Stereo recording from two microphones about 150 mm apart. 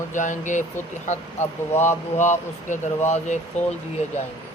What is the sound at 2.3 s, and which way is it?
Speech, 55° left (ahead or behind).